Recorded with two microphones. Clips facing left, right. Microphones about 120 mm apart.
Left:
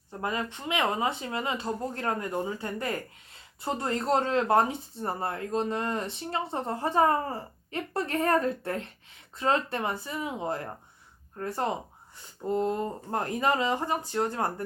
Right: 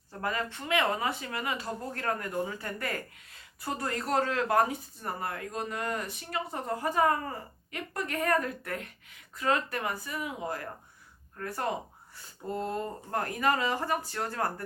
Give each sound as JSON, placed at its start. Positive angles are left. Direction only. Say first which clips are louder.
{"t": 0.2, "sound": "speech", "louder": "left 1 dB", "side_deg": 20}